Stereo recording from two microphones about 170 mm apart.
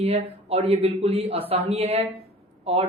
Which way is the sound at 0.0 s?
35° right (ahead or behind).